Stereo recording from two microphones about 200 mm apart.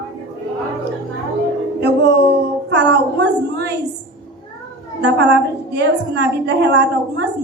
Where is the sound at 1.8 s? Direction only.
60° right (ahead or behind).